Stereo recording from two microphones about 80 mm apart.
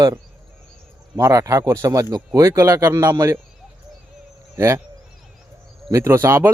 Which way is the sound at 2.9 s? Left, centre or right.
Right.